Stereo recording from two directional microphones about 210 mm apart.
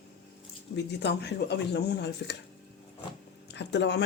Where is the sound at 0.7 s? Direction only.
55° left (ahead or behind).